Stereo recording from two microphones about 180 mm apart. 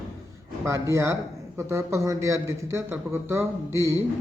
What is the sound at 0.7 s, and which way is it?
A man's voice, 15° right (ahead or behind).